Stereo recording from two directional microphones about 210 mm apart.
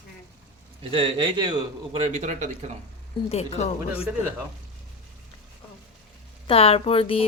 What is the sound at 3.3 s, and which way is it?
Speech, 30° left (ahead or behind).